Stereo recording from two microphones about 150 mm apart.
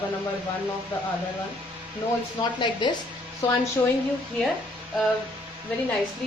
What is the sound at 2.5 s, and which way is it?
Speech, 30° left (ahead or behind).